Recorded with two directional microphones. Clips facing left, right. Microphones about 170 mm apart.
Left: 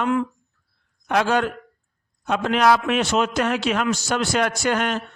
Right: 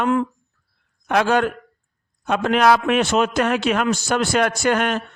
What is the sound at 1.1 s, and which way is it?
A man's voice, 55° right (ahead or behind).